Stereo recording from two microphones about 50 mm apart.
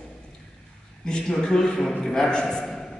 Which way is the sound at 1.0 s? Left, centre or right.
Centre.